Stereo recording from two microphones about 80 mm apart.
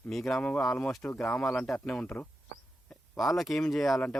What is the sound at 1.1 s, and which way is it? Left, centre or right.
Speech, left.